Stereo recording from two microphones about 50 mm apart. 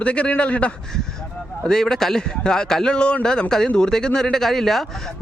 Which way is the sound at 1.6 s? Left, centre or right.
Centre.